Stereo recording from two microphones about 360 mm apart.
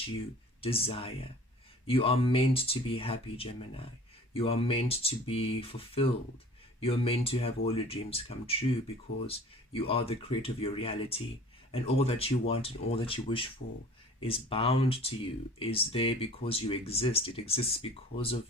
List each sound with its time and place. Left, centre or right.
0.6 s speech: centre
9.7 s speech: centre
13.6 s speech: left
14.2 s speech: centre